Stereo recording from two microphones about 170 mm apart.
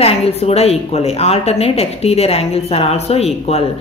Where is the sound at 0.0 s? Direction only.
35° left (ahead or behind).